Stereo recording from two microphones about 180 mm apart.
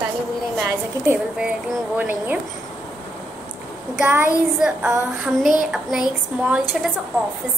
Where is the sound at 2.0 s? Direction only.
10° right (ahead or behind).